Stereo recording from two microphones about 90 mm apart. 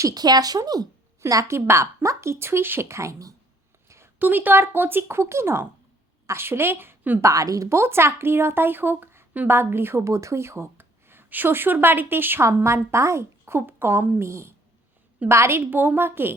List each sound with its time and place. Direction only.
0.0 s a woman's voice: 50° right (ahead or behind)
1.3 s speech: 35° right (ahead or behind)
3.8 s a sound: 30° right (ahead or behind)
4.2 s a woman's voice: 20° right (ahead or behind)
7.2 s a woman's voice: 40° right (ahead or behind)